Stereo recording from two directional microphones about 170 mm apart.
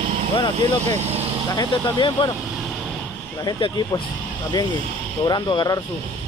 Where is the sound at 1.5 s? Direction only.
25° left (ahead or behind).